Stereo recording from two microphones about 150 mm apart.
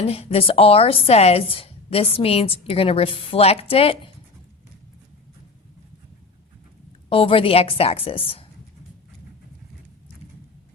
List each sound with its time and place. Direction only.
0.0 s speech: 45° left (ahead or behind)
7.1 s speech: 35° left (ahead or behind)